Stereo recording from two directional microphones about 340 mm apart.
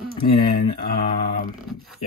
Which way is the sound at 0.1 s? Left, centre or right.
Left.